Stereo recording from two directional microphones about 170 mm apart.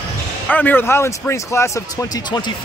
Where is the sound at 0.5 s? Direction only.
10° left (ahead or behind).